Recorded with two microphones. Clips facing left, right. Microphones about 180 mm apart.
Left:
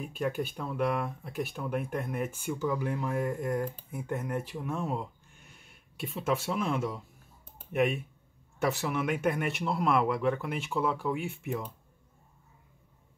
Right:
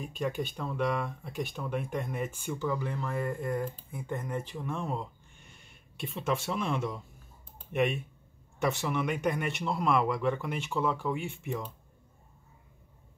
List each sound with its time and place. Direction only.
0.0 s speech: 5° left (ahead or behind)